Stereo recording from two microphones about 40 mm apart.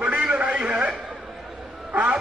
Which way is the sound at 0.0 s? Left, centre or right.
Right.